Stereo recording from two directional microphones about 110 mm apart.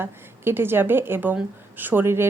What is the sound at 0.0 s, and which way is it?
Speech, 20° right (ahead or behind).